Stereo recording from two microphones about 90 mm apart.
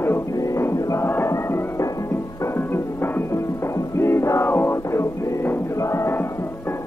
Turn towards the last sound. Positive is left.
turn(degrees=30)  # may be behind; listen again after turning